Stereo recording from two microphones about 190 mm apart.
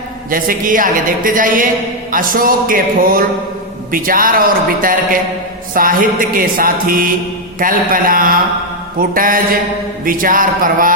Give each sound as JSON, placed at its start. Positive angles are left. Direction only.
{"t": 0.3, "sound": "a woman's voice", "side_deg": -50}